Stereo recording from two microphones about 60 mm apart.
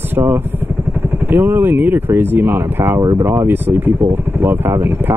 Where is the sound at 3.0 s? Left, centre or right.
Right.